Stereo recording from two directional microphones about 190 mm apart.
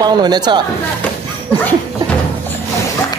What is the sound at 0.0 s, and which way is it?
Speech, 20° right (ahead or behind).